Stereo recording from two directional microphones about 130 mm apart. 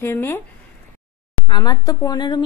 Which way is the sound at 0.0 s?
20° left (ahead or behind).